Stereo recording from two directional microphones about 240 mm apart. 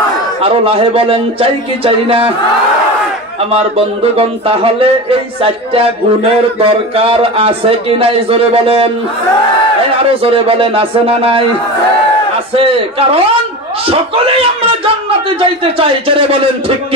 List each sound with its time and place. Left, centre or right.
0.4 s speech: right
3.5 s speech: right
6.6 s speech: right
10.2 s speech: right
12.5 s speech: right
15.8 s speech: right